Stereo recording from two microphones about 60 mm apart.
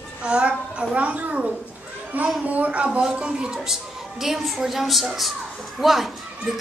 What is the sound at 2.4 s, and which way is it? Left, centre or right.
A child's voice, right.